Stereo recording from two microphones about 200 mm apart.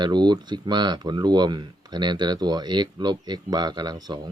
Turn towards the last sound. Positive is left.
turn(degrees=-20)  # may be behind; listen again after turning